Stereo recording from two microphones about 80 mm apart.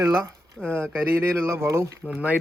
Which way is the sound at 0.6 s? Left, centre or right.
Centre.